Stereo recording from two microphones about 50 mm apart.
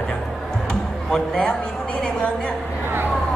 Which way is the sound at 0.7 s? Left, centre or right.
Centre.